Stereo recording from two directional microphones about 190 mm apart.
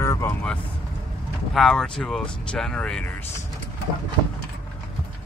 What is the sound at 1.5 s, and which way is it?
Speech, centre (ahead or behind).